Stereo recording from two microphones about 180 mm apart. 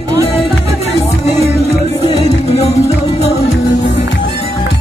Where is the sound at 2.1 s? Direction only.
35° left (ahead or behind).